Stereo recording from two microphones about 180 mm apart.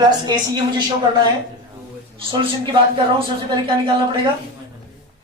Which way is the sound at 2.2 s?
30° right (ahead or behind).